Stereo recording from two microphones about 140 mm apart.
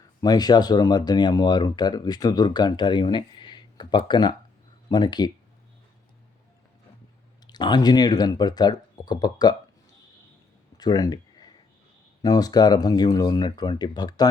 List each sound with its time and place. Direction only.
0.2 s speech: 30° left (ahead or behind)
7.4 s speech: 30° left (ahead or behind)
10.8 s a sound: 30° left (ahead or behind)
12.2 s speech: 25° left (ahead or behind)